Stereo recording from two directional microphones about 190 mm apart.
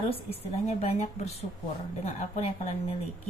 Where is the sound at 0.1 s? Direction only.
30° left (ahead or behind).